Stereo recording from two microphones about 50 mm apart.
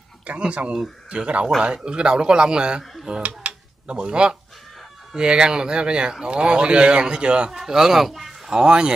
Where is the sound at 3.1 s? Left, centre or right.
Right.